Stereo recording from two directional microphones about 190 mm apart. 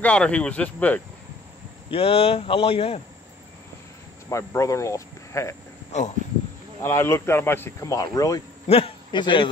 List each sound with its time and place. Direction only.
0.0 s speech: 5° left (ahead or behind)
1.9 s speech: 30° left (ahead or behind)
4.3 s speech: 15° left (ahead or behind)
5.9 s speech: 35° left (ahead or behind)
6.8 s speech: 15° left (ahead or behind)
8.6 s a man's voice: 30° left (ahead or behind)